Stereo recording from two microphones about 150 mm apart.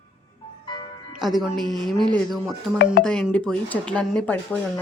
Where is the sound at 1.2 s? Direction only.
Centre (ahead or behind).